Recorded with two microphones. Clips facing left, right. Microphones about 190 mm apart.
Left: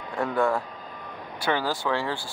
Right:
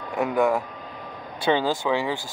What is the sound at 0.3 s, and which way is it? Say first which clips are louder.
Speech: right 3 dB; 15° right (ahead or behind).